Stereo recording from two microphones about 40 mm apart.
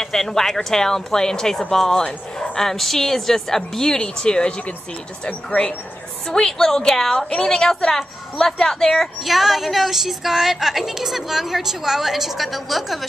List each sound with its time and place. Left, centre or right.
0.0 s a woman's voice: centre
6.2 s a woman's voice: centre
9.2 s a woman's voice: centre